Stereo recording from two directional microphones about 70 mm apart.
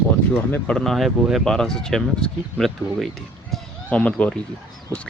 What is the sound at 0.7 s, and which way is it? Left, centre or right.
Speech, centre.